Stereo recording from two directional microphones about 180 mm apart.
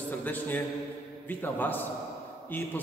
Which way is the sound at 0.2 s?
10° left (ahead or behind).